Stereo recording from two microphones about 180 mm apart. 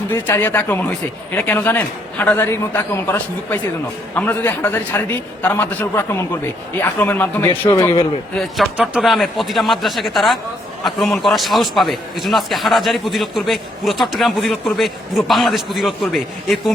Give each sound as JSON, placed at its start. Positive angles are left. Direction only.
{"t": 0.1, "sound": "speech", "side_deg": 10}
{"t": 7.8, "sound": "a man's voice", "side_deg": 25}
{"t": 8.4, "sound": "a man's voice", "side_deg": 0}